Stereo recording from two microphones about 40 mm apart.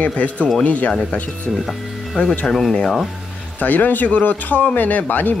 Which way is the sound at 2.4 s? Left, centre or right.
Centre.